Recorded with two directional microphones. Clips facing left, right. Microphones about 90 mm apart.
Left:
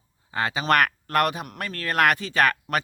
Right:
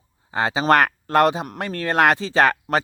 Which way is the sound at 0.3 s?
25° right (ahead or behind).